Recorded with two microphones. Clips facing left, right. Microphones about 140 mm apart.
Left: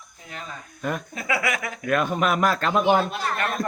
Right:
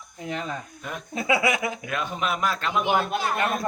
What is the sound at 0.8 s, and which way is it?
Speech, 55° left (ahead or behind).